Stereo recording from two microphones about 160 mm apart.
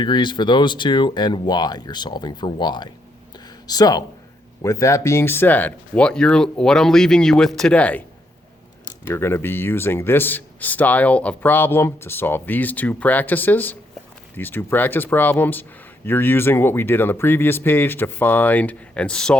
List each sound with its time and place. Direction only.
0.0 s speech: 30° left (ahead or behind)
3.3 s a sound: 25° left (ahead or behind)
4.6 s speech: 20° left (ahead or behind)
8.8 s speech: 25° left (ahead or behind); by 19.4 s 5° left (ahead or behind)